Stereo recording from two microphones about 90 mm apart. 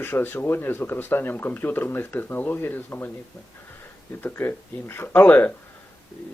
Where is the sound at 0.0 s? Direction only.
25° left (ahead or behind).